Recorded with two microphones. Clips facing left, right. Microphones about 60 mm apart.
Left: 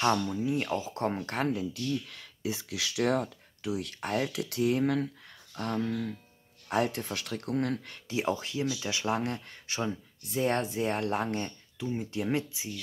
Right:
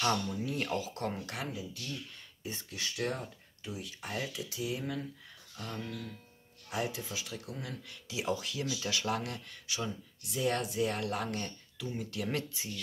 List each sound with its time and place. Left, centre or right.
0.0 s speech: left
2.0 s speech: left
5.6 s speech: left
6.7 s speech: left; by 12.7 s centre